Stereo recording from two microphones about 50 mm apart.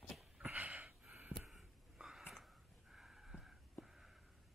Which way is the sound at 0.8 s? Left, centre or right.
Right.